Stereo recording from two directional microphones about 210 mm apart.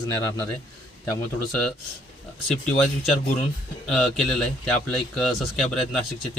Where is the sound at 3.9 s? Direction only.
Centre (ahead or behind).